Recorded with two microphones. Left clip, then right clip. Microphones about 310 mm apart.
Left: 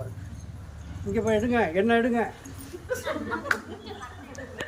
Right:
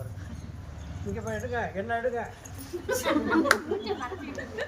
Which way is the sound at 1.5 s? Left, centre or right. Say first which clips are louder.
Left 5 dB; left.